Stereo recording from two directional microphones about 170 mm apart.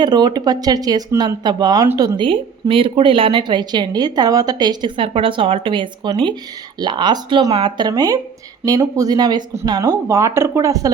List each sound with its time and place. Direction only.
0.0 s a woman's voice: 25° right (ahead or behind)